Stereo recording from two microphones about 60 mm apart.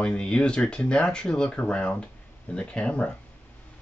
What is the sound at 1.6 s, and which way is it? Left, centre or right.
Speech, left.